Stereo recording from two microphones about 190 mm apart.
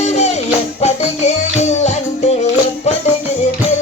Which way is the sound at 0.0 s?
35° left (ahead or behind).